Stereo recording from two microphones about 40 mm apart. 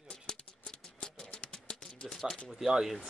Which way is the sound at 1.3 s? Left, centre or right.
Left.